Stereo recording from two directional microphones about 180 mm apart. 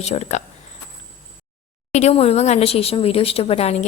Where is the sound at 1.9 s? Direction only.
35° left (ahead or behind).